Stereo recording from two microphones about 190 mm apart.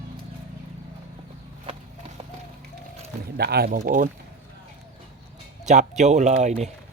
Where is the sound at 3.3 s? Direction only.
55° right (ahead or behind).